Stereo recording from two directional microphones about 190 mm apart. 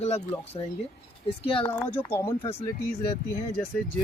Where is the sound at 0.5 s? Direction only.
25° left (ahead or behind).